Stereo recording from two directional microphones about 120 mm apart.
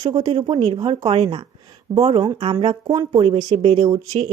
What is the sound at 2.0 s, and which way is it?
Speech, 55° right (ahead or behind).